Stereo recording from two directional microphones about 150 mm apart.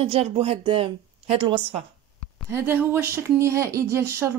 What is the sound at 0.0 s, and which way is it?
A woman's voice, 40° right (ahead or behind).